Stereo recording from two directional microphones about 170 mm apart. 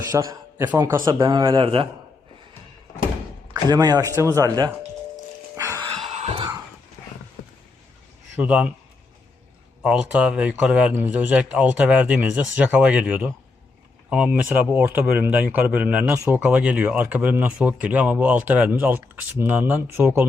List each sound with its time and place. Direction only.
0.1 s a man's voice: 20° right (ahead or behind)
3.5 s a man's voice: 25° right (ahead or behind)
5.5 s music: 20° right (ahead or behind)
6.1 s a sound: 40° right (ahead or behind)
8.4 s speech: 10° right (ahead or behind)
9.8 s speech: 5° right (ahead or behind)